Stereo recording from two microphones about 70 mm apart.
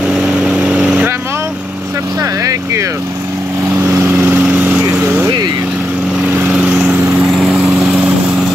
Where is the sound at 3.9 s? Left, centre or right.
Right.